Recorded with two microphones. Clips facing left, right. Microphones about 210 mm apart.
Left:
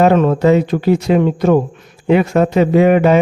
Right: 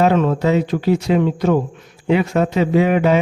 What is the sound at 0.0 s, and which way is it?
Speech, 55° left (ahead or behind).